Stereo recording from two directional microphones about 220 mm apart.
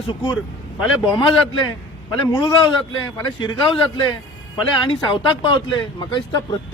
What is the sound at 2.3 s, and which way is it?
Speech, 15° left (ahead or behind).